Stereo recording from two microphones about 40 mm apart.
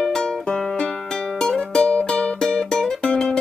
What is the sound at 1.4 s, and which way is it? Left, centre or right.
Music, left.